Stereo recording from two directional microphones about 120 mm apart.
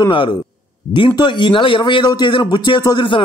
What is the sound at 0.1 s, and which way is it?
A man's voice, 45° left (ahead or behind).